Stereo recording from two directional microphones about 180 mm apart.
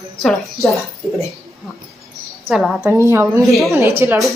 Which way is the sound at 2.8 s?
15° right (ahead or behind).